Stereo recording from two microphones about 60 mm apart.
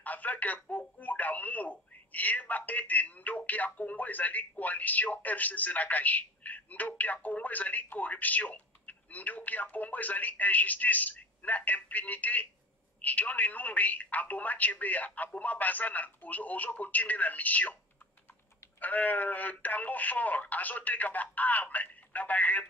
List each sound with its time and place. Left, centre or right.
0.0 s speech: left
18.8 s speech: left